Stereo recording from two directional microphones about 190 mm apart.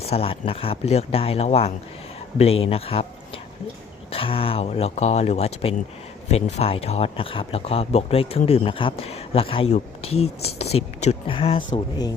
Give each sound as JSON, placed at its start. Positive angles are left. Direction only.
{"t": 0.0, "sound": "speech", "side_deg": 30}
{"t": 4.1, "sound": "speech", "side_deg": 30}